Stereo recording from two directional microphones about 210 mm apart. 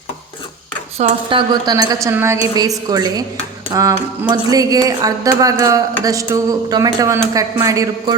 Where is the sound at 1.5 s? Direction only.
20° right (ahead or behind).